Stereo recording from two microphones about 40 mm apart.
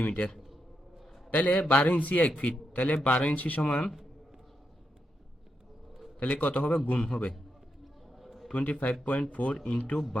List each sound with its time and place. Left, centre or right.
0.0 s a man's voice: left
0.3 s a sound: centre
1.3 s a man's voice: left
3.6 s speech: left
6.1 s a man's voice: left
8.1 s a sound: centre
8.5 s a man's voice: left